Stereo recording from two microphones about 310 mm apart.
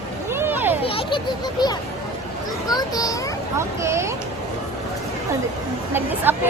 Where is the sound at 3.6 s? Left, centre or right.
Centre.